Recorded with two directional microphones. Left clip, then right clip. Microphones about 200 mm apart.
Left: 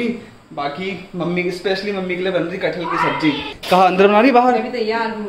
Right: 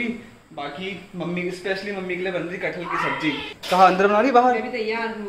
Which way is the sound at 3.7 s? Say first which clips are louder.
Left 4 dB; 25° left (ahead or behind).